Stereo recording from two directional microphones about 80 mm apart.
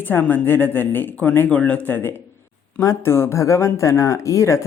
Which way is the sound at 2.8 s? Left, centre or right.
Left.